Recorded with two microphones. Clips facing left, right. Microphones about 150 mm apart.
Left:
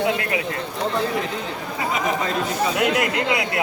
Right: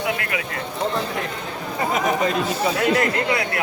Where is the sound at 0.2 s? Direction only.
30° left (ahead or behind).